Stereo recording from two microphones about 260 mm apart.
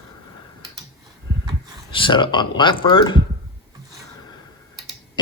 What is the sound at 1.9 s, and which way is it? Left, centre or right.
Speech, centre.